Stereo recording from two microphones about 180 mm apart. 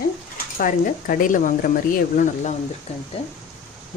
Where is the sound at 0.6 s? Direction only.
50° left (ahead or behind).